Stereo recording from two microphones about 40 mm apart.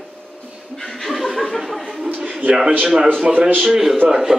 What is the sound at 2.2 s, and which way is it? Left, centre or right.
Speech, right.